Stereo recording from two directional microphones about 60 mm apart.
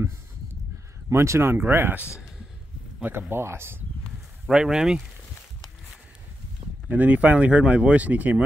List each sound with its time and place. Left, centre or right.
1.1 s speech: right
2.0 s speech: left
3.1 s speech: right
4.5 s speech: centre
6.9 s speech: right